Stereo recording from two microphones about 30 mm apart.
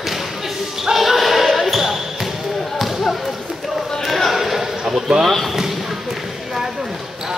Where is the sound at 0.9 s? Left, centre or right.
Centre.